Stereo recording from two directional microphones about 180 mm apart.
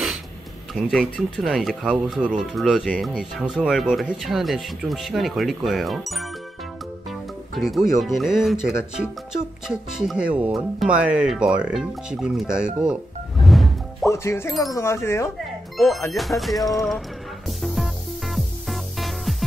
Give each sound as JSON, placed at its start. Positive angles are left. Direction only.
{"t": 0.7, "sound": "speech", "side_deg": 0}
{"t": 14.0, "sound": "speech", "side_deg": 15}
{"t": 16.1, "sound": "speech", "side_deg": 0}
{"t": 17.5, "sound": "music", "side_deg": 0}